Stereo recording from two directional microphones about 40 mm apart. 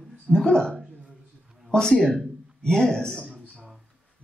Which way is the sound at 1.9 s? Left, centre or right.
Centre.